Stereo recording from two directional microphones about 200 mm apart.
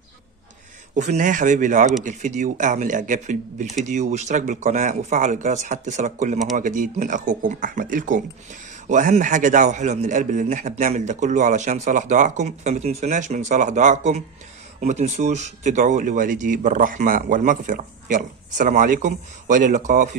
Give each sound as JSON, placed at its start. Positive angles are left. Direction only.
{"t": 0.9, "sound": "a man's voice", "side_deg": -35}